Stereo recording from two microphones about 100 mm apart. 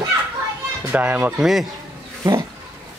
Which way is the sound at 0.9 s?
15° right (ahead or behind).